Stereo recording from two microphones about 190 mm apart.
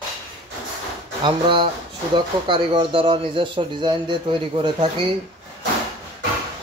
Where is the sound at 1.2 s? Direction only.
25° right (ahead or behind).